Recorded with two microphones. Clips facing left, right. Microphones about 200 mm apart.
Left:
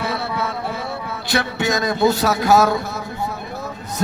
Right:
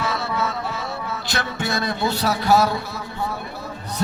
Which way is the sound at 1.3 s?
55° left (ahead or behind).